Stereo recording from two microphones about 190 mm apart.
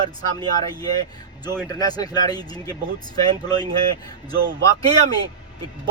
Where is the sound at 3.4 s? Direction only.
20° left (ahead or behind).